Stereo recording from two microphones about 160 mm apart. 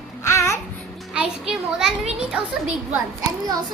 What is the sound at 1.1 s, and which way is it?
A child's voice, 5° right (ahead or behind).